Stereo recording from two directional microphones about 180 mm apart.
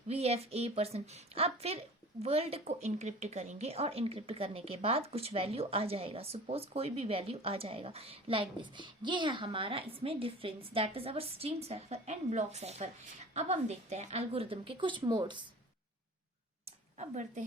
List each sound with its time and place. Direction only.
0.1 s a woman's voice: 35° right (ahead or behind)
17.0 s a woman's voice: 40° right (ahead or behind)